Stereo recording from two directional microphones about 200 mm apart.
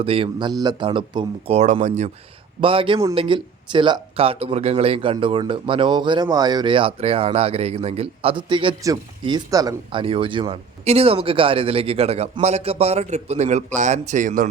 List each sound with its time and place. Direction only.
0.0 s speech: 25° right (ahead or behind)
2.6 s speech: 25° right (ahead or behind)